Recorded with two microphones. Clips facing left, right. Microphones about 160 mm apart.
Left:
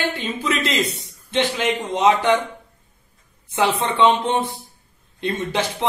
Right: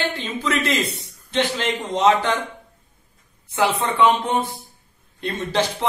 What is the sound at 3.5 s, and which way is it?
A man's voice, 25° left (ahead or behind).